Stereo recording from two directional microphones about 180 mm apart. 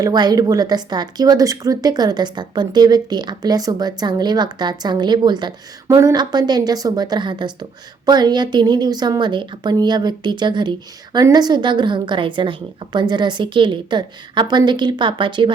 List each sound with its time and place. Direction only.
0.0 s a woman's voice: 20° right (ahead or behind)